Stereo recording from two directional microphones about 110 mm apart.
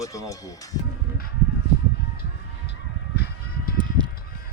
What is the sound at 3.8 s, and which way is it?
Music, 45° right (ahead or behind).